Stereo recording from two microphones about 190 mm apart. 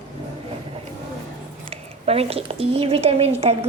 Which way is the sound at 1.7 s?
30° right (ahead or behind).